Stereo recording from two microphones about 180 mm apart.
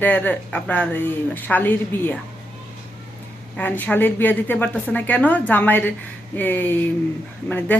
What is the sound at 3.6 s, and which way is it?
Speech, 10° left (ahead or behind).